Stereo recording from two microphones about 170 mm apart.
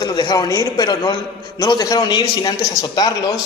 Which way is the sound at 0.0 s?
25° left (ahead or behind).